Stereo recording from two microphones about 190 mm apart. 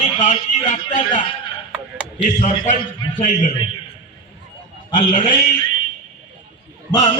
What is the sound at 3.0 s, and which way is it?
Speech, 25° left (ahead or behind).